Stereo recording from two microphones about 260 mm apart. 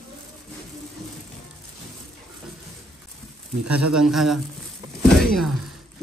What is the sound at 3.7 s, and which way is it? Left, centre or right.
Speech, right.